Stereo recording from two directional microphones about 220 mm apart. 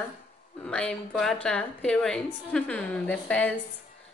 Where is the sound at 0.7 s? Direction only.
5° left (ahead or behind).